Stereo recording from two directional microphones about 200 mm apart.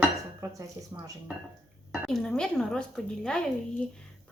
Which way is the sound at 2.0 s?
Centre (ahead or behind).